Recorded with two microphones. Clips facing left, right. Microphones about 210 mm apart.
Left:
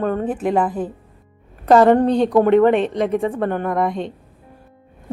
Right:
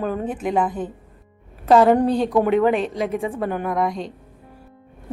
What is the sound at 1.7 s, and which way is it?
A woman's voice, 5° right (ahead or behind).